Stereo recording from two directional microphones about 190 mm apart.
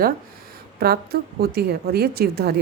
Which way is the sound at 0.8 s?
55° right (ahead or behind).